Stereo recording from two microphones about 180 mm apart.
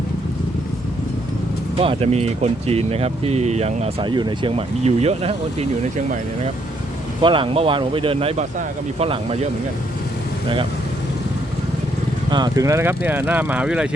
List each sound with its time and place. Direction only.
1.8 s speech: 35° right (ahead or behind)
4.1 s speech: 25° right (ahead or behind)
7.2 s speech: 30° right (ahead or behind)
12.3 s speech: 20° right (ahead or behind)